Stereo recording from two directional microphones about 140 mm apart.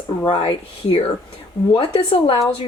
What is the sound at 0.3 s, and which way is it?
Speech, 40° left (ahead or behind).